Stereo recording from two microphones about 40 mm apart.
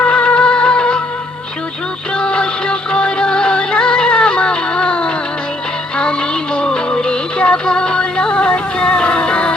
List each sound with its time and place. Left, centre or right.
0.0 s music: left
2.1 s music: left
8.8 s a sound: left